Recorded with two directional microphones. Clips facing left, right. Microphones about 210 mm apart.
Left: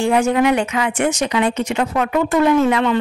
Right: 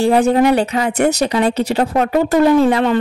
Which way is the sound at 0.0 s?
35° right (ahead or behind).